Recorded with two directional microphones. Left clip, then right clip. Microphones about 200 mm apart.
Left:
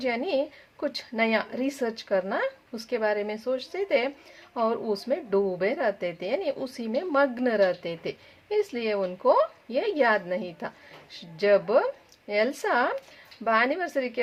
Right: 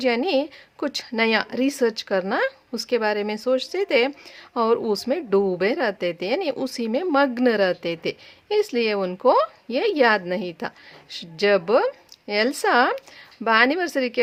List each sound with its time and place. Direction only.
0.0 s a woman's voice: 35° right (ahead or behind)